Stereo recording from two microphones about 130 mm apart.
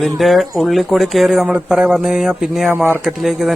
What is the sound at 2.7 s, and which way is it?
Speech, 15° right (ahead or behind).